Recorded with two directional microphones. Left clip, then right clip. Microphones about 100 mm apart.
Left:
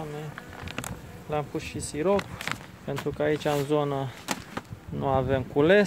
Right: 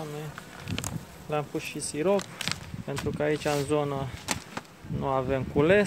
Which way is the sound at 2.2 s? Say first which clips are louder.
Even; 30° left (ahead or behind).